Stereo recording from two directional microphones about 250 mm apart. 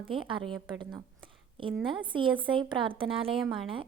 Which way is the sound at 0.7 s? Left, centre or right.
Centre.